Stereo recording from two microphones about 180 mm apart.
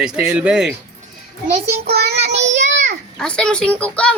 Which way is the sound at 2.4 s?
40° right (ahead or behind).